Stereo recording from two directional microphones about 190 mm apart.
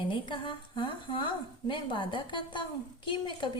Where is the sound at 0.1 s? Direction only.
25° left (ahead or behind).